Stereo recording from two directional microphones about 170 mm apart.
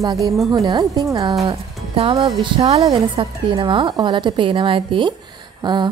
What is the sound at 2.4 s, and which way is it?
A woman's voice, 35° right (ahead or behind).